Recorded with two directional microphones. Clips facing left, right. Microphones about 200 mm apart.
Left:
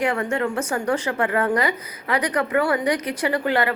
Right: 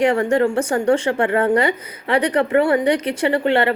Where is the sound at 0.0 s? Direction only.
30° right (ahead or behind).